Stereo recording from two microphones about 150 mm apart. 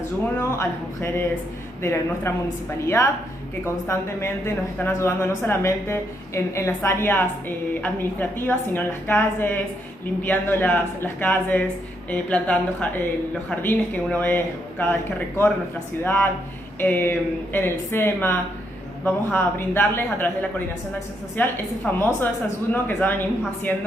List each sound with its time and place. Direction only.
0.4 s a woman's voice: 15° left (ahead or behind)
3.6 s a woman's voice: 20° left (ahead or behind)